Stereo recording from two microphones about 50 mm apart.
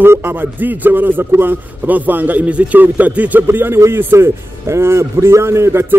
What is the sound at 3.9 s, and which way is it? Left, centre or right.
A man's voice, right.